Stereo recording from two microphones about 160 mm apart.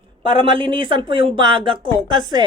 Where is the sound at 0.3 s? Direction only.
30° right (ahead or behind).